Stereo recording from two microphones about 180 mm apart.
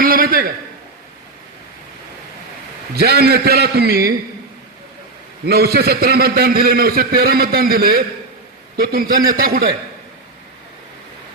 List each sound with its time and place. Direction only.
0.0 s a sound: 55° right (ahead or behind)
2.9 s a man's voice: 60° right (ahead or behind)
5.5 s a man's voice: 60° right (ahead or behind)